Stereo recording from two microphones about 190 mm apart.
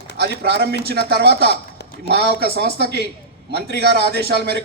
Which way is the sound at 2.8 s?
60° left (ahead or behind).